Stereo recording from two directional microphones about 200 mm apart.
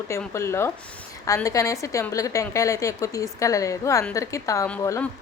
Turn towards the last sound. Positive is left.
turn(degrees=10)  # may be behind; listen again after turning